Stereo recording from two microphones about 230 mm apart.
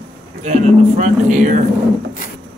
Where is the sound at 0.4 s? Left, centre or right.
Right.